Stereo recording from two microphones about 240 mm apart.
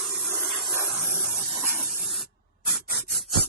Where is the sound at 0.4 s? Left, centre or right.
Centre.